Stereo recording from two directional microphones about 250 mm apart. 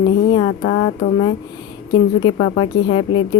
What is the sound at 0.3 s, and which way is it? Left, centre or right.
A woman's voice, centre.